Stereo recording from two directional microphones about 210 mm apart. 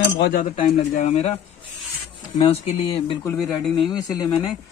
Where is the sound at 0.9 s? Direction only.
30° left (ahead or behind).